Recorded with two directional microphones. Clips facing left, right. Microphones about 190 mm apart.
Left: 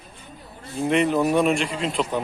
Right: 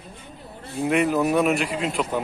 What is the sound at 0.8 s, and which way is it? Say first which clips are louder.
Speech: left 1 dB; 5° right (ahead or behind).